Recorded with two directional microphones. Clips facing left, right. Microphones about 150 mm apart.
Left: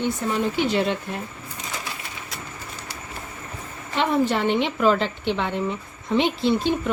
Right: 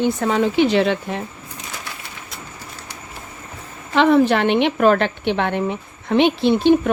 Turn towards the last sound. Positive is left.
turn(degrees=-70)  # may be behind; listen again after turning